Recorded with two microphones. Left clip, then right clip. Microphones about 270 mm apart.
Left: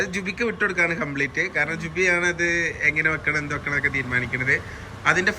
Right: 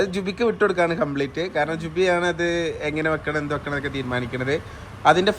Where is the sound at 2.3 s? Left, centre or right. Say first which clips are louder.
Left 1 dB; right.